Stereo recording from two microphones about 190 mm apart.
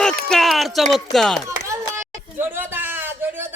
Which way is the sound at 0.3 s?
Centre (ahead or behind).